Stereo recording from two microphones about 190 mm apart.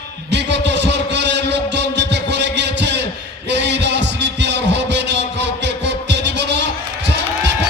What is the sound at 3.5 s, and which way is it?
Heart murmur, 65° right (ahead or behind).